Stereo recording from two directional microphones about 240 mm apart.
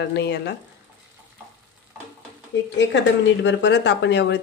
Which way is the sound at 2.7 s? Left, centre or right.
Left.